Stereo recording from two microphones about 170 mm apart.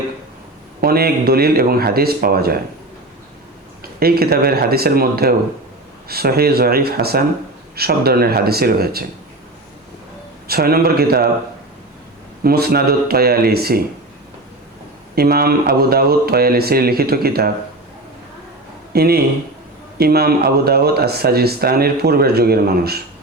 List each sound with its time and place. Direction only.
0.8 s speech: 65° right (ahead or behind)
4.0 s speech: 65° right (ahead or behind)
10.4 s speech: 65° right (ahead or behind)
12.4 s speech: 65° right (ahead or behind)
15.1 s speech: 65° right (ahead or behind)
18.9 s speech: 65° right (ahead or behind)